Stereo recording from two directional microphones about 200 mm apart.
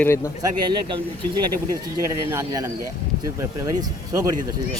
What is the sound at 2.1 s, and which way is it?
Speech, 15° right (ahead or behind).